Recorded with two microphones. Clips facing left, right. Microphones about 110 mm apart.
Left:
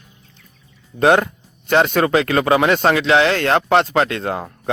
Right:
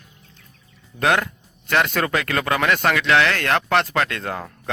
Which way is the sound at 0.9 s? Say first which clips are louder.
Left 6 dB; 20° left (ahead or behind).